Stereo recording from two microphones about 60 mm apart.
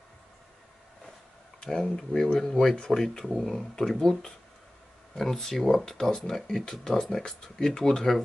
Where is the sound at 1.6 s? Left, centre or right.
Centre.